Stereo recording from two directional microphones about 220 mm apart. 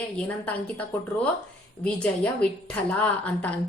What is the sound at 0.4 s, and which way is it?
A woman's voice, 5° left (ahead or behind).